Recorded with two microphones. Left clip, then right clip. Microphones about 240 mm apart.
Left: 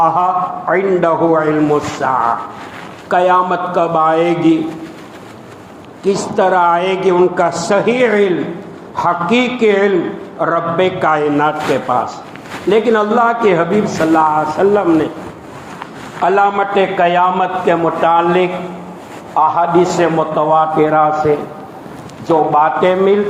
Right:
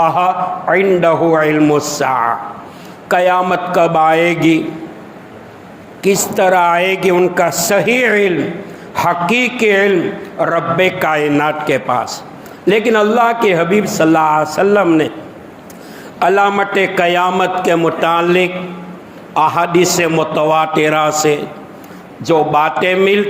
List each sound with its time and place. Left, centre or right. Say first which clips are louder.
0.7 s a man's voice: right 2 dB; right
6.0 s a man's voice: right 1 dB; right
16.2 s a man's voice: even; right